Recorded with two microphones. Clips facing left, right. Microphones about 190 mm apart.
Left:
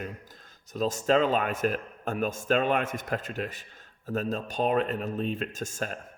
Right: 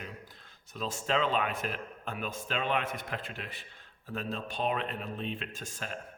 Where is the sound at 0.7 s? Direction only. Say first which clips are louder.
Left 8 dB; 40° left (ahead or behind).